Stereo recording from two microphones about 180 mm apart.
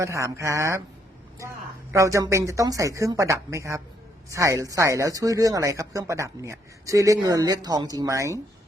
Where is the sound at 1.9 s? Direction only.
15° right (ahead or behind).